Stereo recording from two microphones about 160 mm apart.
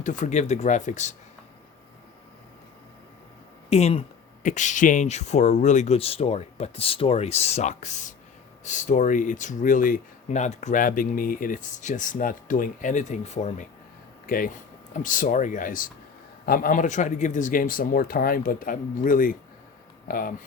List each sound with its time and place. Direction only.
0.0 s speech: 50° left (ahead or behind)
3.7 s speech: 40° left (ahead or behind)
14.3 s speech: 60° left (ahead or behind)